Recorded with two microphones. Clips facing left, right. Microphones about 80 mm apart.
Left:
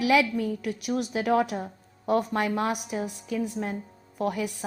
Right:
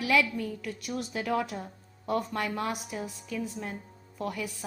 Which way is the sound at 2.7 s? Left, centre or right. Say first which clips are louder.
Left 5 dB; left.